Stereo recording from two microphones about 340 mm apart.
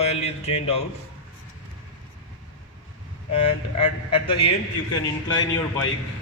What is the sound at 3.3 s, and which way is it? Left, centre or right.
A man's voice, centre.